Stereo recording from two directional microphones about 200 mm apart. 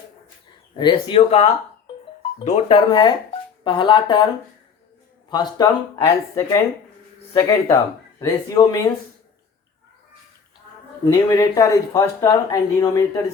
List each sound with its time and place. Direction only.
0.8 s speech: 25° left (ahead or behind)
5.3 s speech: 20° left (ahead or behind)
11.0 s speech: 20° left (ahead or behind)